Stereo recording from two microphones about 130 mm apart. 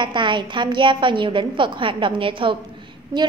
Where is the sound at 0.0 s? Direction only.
35° right (ahead or behind).